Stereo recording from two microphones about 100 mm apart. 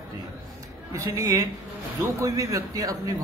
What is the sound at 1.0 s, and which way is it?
A man's voice, 30° right (ahead or behind).